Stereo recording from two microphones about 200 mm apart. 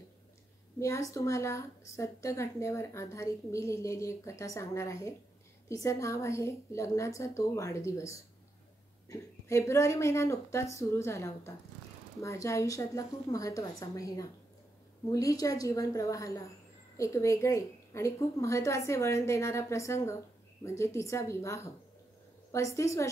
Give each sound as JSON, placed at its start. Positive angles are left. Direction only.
{"t": 0.7, "sound": "a woman's voice", "side_deg": 15}